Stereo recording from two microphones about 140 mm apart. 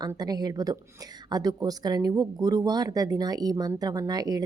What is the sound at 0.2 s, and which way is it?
Speech, 30° right (ahead or behind).